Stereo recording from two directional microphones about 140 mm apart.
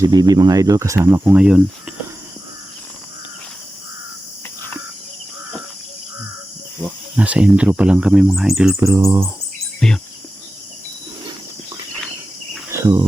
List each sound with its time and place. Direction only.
0.0 s speech: 25° right (ahead or behind); by 1.6 s 5° right (ahead or behind)
6.8 s speech: 10° right (ahead or behind)
8.7 s speech: 20° right (ahead or behind)
9.8 s cricket: 5° left (ahead or behind)
12.7 s cricket: 25° right (ahead or behind)